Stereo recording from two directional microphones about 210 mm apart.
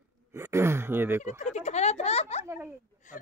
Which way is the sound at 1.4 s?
30° left (ahead or behind).